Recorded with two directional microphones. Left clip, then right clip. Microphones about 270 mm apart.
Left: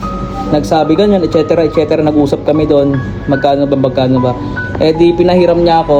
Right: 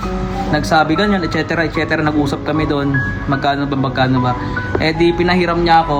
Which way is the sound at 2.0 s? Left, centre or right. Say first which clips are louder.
Left 6 dB; centre.